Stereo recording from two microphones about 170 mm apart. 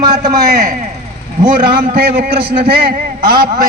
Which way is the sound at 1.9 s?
65° right (ahead or behind).